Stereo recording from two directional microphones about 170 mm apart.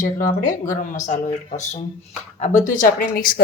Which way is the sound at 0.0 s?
55° left (ahead or behind).